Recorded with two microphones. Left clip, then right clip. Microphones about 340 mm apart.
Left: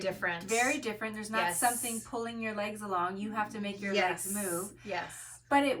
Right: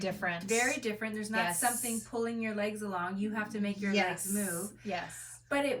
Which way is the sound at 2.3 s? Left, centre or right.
Centre.